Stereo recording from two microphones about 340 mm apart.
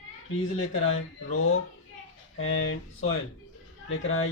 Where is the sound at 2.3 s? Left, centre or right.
Left.